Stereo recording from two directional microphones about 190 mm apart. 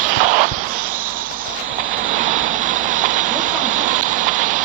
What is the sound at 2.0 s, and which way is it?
Vehicle, 45° right (ahead or behind).